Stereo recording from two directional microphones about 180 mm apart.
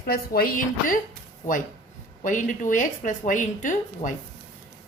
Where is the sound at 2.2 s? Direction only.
45° left (ahead or behind).